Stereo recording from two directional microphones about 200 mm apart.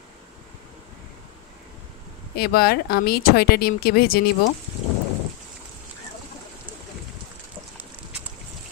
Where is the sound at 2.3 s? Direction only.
50° left (ahead or behind).